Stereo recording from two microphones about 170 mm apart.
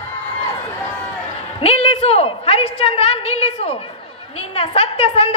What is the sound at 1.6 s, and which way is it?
A woman's voice, 35° left (ahead or behind).